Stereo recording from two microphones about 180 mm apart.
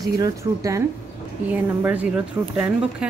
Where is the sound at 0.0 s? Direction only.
20° right (ahead or behind).